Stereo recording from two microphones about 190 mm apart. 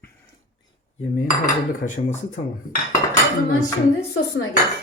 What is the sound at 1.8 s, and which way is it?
Speech, 40° left (ahead or behind).